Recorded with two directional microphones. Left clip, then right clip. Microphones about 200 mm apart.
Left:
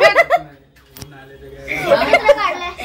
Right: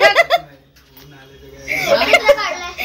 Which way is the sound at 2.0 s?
Centre (ahead or behind).